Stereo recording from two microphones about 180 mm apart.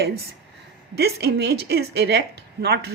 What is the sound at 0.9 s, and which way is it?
Speech, 65° right (ahead or behind).